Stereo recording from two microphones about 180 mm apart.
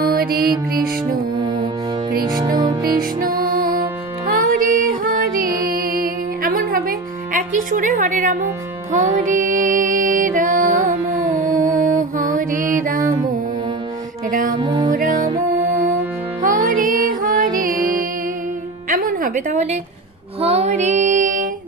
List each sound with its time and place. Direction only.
0.0 s music: 55° right (ahead or behind)
2.3 s music: 20° right (ahead or behind)
2.8 s music: 55° right (ahead or behind)
7.3 s a woman's voice: 45° right (ahead or behind)
9.3 s music: 45° right (ahead or behind)
14.3 s music: 45° right (ahead or behind)
14.6 s music: 25° right (ahead or behind)
14.9 s music: 45° right (ahead or behind)
18.9 s a sound: 50° right (ahead or behind)
20.3 s music: 35° right (ahead or behind)